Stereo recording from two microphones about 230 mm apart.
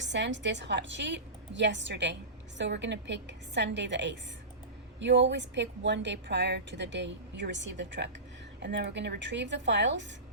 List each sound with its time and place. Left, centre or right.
0.0 s a woman's voice: right